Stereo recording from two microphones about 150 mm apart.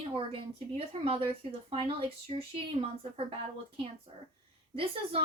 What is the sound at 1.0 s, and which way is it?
Speech, 40° right (ahead or behind).